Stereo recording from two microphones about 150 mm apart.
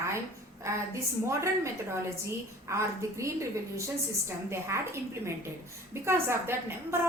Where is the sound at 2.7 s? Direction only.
20° right (ahead or behind).